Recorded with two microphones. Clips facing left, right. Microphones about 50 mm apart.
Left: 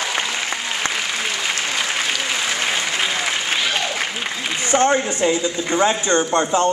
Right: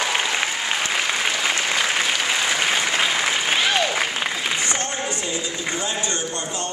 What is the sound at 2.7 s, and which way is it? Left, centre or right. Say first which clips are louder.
Applause: right 1 dB; centre.